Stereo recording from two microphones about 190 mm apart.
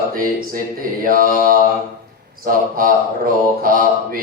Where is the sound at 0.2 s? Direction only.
50° right (ahead or behind).